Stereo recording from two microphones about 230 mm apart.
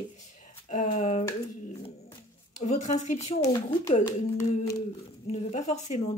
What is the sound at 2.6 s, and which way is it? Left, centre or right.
Speech, left.